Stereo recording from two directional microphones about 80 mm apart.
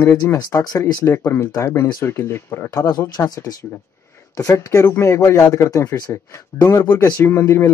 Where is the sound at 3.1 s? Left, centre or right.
Left.